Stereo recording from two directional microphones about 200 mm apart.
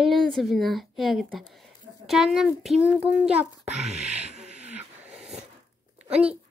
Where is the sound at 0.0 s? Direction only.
Centre (ahead or behind).